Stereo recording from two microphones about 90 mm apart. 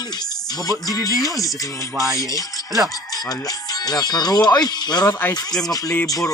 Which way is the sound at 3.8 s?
50° left (ahead or behind).